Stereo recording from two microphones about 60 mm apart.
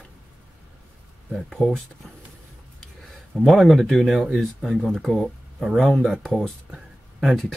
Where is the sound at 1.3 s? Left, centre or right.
Centre.